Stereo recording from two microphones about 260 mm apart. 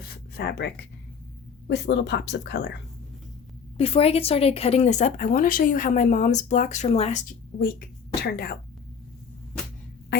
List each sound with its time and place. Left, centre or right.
0.0 s a sound: left
1.6 s a woman's voice: left
3.8 s a woman's voice: left
7.6 s speech: left